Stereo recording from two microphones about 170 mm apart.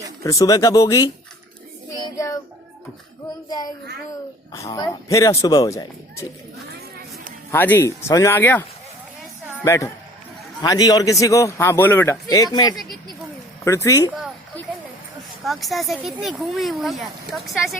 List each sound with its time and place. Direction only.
0.2 s a man's voice: 20° left (ahead or behind)
2.1 s child singing: 20° left (ahead or behind)
4.5 s a man's voice: 20° left (ahead or behind)
7.5 s speech: 10° left (ahead or behind)
9.6 s a man's voice: 15° left (ahead or behind)
15.4 s speech: centre (ahead or behind)